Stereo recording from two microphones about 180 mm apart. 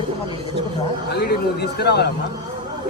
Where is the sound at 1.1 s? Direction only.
65° left (ahead or behind).